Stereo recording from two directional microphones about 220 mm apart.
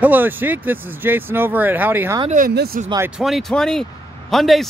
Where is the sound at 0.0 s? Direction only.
10° right (ahead or behind).